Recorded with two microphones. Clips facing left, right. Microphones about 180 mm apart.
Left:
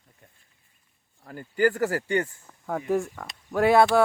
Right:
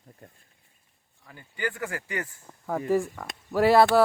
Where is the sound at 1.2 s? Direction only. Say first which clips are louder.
Left 10 dB; 45° left (ahead or behind).